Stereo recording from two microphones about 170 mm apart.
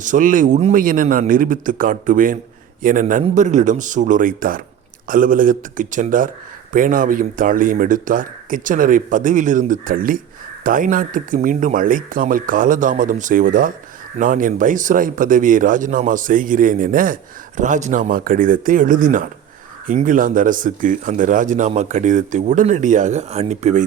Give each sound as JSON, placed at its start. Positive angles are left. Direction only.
{"t": 0.0, "sound": "speech", "side_deg": -50}